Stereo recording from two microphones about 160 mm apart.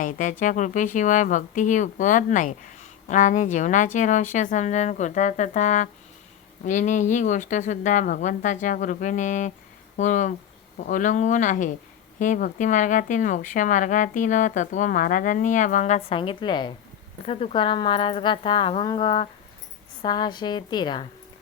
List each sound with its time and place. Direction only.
0.0 s a woman's voice: 55° left (ahead or behind); by 21.1 s 30° left (ahead or behind)